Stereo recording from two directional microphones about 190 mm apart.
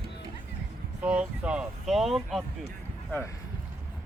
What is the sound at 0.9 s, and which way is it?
Speech, 5° right (ahead or behind).